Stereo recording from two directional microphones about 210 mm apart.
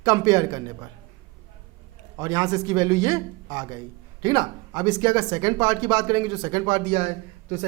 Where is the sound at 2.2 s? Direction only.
15° right (ahead or behind).